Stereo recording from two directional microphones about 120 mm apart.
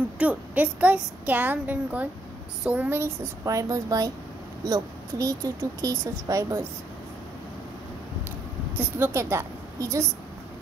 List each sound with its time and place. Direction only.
0.2 s a woman's voice: 10° right (ahead or behind); by 6.6 s 30° right (ahead or behind)
8.7 s a woman's voice: 15° right (ahead or behind)